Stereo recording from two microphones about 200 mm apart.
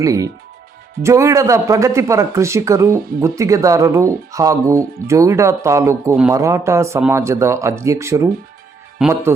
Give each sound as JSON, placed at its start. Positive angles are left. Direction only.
{"t": 0.0, "sound": "speech", "side_deg": -15}